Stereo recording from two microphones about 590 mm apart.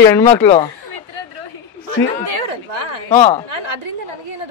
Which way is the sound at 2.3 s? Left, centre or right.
Right.